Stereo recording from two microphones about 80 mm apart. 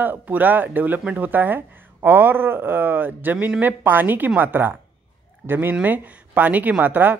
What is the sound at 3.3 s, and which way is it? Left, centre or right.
Speech, centre.